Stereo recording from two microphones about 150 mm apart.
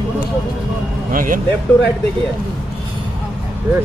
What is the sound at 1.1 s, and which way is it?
Speech, 65° right (ahead or behind).